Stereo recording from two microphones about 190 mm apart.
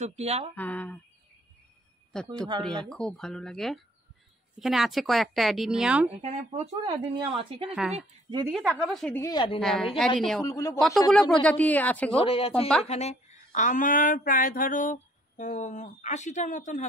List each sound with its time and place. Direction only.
0.0 s speech: 35° right (ahead or behind)
0.6 s speech: 10° left (ahead or behind)
2.1 s a woman's voice: 5° left (ahead or behind)
6.2 s speech: 35° right (ahead or behind)
6.8 s speech: 20° right (ahead or behind)
8.5 s a woman's voice: 5° right (ahead or behind); by 9.3 s 10° left (ahead or behind)
9.3 s speech: 25° left (ahead or behind)
9.6 s a woman's voice: centre (ahead or behind)
10.4 s speech: 15° left (ahead or behind)
11.1 s a woman's voice: 5° left (ahead or behind)
12.2 s speech: 30° left (ahead or behind)